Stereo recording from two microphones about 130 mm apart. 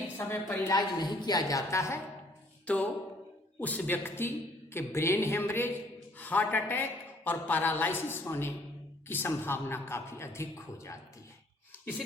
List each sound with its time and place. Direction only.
0.2 s a woman's voice: 20° left (ahead or behind)
2.7 s a woman's voice: 10° left (ahead or behind)